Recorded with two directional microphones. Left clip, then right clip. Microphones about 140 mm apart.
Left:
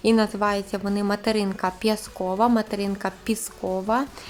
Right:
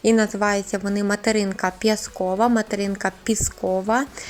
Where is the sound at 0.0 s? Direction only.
15° right (ahead or behind).